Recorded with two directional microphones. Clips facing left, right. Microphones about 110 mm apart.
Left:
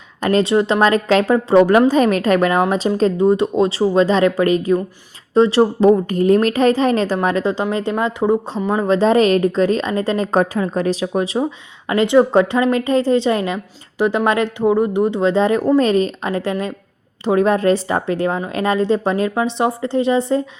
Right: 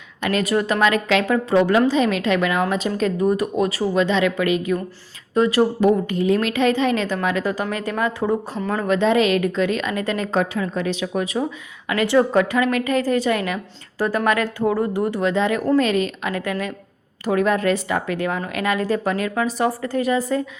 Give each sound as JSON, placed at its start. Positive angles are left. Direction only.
{"t": 0.2, "sound": "a woman's voice", "side_deg": 35}
{"t": 0.8, "sound": "a woman's voice", "side_deg": 35}
{"t": 1.9, "sound": "a woman's voice", "side_deg": 45}
{"t": 5.9, "sound": "a woman's voice", "side_deg": 45}
{"t": 9.0, "sound": "a woman's voice", "side_deg": 35}
{"t": 11.9, "sound": "a woman's voice", "side_deg": 20}